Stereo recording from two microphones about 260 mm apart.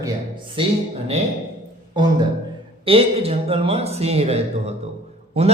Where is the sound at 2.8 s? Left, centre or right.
Right.